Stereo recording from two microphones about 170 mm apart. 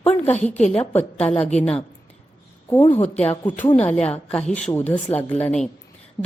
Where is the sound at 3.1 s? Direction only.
10° left (ahead or behind).